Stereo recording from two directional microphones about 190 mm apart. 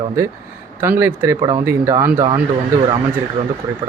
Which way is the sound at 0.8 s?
10° right (ahead or behind).